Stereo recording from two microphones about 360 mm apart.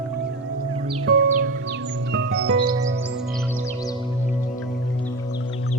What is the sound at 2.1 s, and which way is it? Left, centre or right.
Music, right.